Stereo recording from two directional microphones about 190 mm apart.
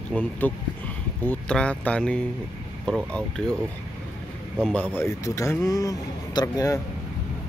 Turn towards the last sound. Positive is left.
turn(degrees=20)  # may be behind; listen again after turning